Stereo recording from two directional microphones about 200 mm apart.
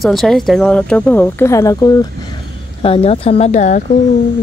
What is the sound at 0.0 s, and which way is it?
Speech, centre (ahead or behind).